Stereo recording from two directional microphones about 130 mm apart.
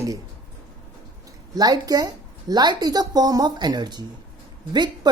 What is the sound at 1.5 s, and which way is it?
A woman's voice, 30° right (ahead or behind).